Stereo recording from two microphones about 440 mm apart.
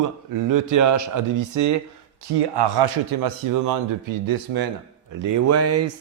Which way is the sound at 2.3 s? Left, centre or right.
Right.